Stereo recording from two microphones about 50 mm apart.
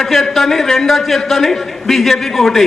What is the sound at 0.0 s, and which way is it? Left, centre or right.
A man's voice, centre.